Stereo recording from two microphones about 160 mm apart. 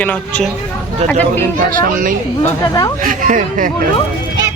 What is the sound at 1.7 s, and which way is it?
Speech, 60° right (ahead or behind).